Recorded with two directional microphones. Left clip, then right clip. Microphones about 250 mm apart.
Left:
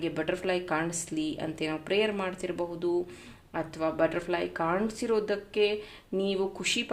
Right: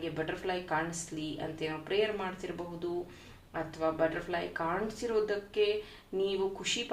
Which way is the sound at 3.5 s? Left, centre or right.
Left.